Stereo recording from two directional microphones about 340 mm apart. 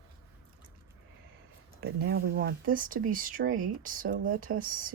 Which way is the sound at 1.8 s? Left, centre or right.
Right.